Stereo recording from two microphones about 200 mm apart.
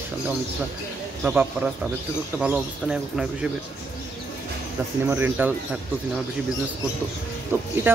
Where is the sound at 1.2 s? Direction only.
5° right (ahead or behind).